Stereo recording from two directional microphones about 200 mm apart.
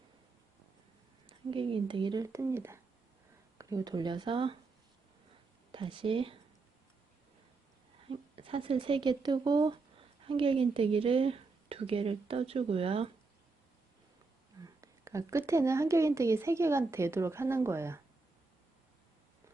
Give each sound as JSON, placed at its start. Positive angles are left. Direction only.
{"t": 1.3, "sound": "speech", "side_deg": -25}
{"t": 5.7, "sound": "speech", "side_deg": -25}
{"t": 8.1, "sound": "speech", "side_deg": -25}
{"t": 14.8, "sound": "speech", "side_deg": -15}